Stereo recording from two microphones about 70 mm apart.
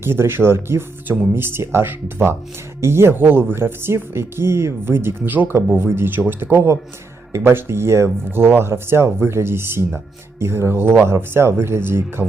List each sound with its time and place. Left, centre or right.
0.0 s speech: right